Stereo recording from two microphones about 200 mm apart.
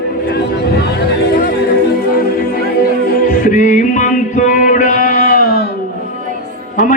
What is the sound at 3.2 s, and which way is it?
Music, 40° left (ahead or behind).